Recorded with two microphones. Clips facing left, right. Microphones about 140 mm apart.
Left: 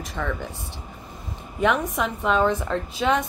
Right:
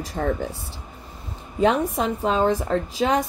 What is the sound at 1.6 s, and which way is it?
Speech, 35° right (ahead or behind).